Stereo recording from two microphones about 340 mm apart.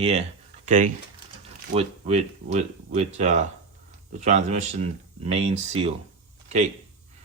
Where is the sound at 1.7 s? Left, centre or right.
Centre.